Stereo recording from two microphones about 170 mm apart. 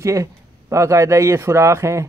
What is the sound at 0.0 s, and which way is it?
A man's voice, 15° right (ahead or behind).